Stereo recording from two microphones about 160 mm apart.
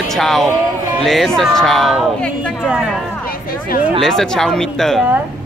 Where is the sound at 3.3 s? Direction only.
65° left (ahead or behind).